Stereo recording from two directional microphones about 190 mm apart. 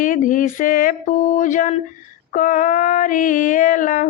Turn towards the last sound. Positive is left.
turn(degrees=45)  # may be behind; listen again after turning